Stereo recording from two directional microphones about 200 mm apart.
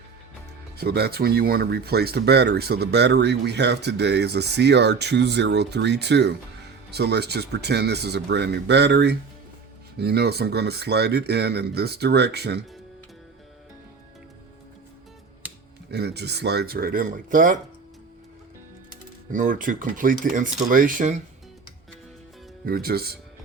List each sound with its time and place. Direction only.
0.8 s speech: 55° right (ahead or behind)
15.9 s speech: 55° right (ahead or behind)
19.3 s speech: 40° right (ahead or behind)
22.6 s speech: 50° right (ahead or behind)